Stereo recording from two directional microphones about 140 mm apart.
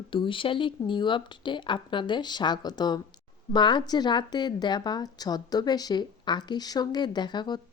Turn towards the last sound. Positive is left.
turn(degrees=30)  # may be behind; listen again after turning